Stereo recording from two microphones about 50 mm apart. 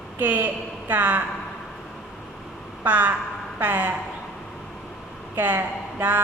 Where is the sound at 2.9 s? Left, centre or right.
Right.